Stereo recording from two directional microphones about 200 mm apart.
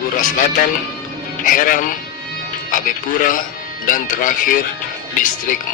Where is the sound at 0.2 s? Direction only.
40° left (ahead or behind).